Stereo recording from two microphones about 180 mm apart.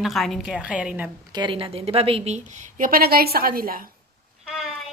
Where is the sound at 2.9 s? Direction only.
55° right (ahead or behind).